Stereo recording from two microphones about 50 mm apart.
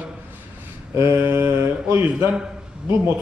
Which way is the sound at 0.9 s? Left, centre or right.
Right.